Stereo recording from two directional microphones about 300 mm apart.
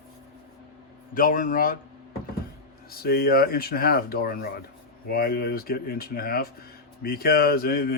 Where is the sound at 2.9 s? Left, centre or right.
Left.